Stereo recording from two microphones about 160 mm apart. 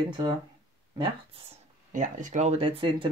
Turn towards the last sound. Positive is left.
turn(degrees=-30)  # may be behind; listen again after turning